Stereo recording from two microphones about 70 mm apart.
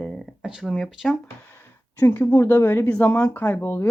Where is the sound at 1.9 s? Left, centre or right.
Left.